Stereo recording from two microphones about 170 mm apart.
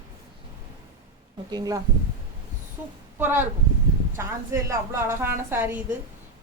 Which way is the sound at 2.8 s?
10° right (ahead or behind).